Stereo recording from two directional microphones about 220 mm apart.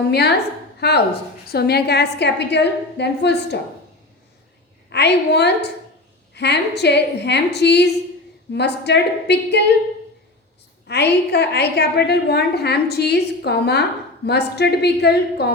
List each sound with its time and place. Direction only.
0.8 s a woman's voice: 50° left (ahead or behind)
4.9 s a woman's voice: 50° left (ahead or behind)
10.8 s a woman's voice: 50° left (ahead or behind)